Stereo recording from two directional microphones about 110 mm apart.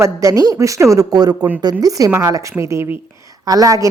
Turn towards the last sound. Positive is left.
turn(degrees=-30)  # may be behind; listen again after turning